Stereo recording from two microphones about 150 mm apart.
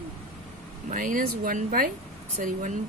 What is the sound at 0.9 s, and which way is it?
A woman's voice, 60° right (ahead or behind).